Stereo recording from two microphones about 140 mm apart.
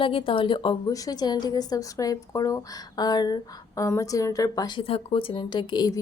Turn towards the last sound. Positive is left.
turn(degrees=30)  # may be behind; listen again after turning